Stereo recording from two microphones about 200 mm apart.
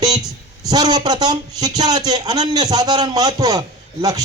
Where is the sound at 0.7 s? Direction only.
20° right (ahead or behind).